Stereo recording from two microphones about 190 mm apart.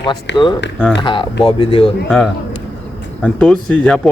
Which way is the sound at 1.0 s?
25° left (ahead or behind).